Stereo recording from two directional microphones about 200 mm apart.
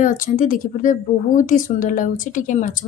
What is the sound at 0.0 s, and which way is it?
Speech, 40° left (ahead or behind).